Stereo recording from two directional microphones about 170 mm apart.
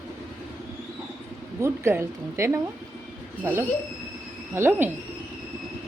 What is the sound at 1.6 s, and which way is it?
Speech, 15° right (ahead or behind).